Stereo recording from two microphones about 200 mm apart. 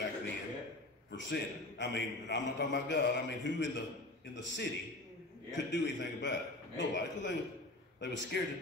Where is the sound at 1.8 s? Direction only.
60° left (ahead or behind).